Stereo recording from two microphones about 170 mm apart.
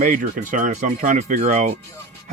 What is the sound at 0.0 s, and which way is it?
Speech, 50° right (ahead or behind).